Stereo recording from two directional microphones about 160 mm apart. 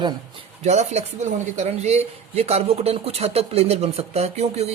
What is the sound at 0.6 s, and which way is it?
Speech, 45° right (ahead or behind).